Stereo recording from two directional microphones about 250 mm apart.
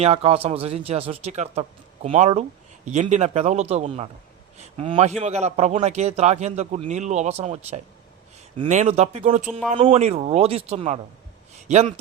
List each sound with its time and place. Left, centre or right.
0.0 s a man's voice: right